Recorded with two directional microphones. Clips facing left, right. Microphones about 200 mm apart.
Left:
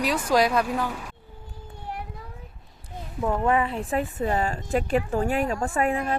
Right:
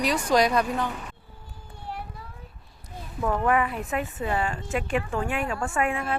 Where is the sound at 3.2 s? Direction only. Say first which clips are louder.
Left 1 dB; 20° left (ahead or behind).